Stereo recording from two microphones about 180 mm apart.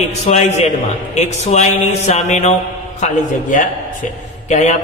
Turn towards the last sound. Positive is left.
turn(degrees=40)  # may be behind; listen again after turning